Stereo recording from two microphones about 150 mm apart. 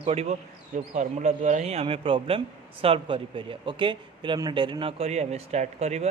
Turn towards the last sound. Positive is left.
turn(degrees=-45)  # may be behind; listen again after turning